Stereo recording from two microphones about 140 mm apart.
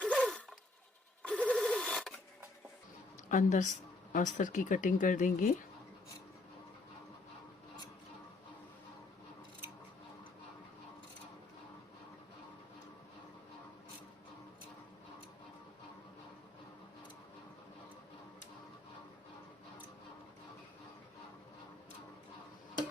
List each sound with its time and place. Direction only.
0.0 s a sound: 5° left (ahead or behind)
1.2 s rub: 10° left (ahead or behind)
3.2 s speech: 60° left (ahead or behind)